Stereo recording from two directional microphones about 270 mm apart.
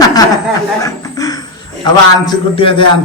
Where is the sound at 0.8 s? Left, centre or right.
Centre.